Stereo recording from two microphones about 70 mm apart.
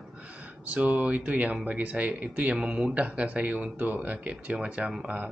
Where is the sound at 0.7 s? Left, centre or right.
Centre.